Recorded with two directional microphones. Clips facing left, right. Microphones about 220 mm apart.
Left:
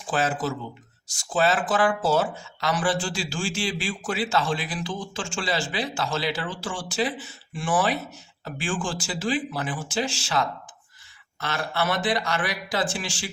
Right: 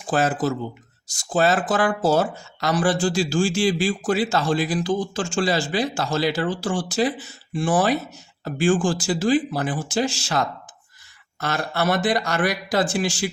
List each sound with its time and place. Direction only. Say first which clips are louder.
0.1 s speech: right 4 dB; 40° right (ahead or behind)